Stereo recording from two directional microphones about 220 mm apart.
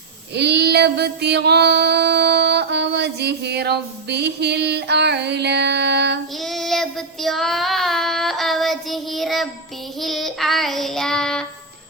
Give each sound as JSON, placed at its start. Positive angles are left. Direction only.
{"t": 0.3, "sound": "female singing", "side_deg": -50}
{"t": 6.4, "sound": "child singing", "side_deg": 0}